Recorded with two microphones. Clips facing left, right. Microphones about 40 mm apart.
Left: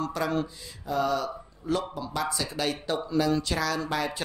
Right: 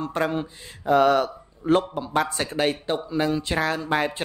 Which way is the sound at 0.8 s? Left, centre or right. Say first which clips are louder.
Right 9 dB; right.